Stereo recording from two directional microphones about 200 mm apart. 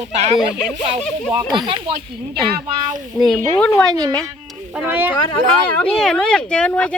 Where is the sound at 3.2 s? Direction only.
5° left (ahead or behind).